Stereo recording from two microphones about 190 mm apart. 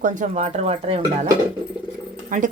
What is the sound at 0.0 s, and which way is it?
Speech, 40° right (ahead or behind).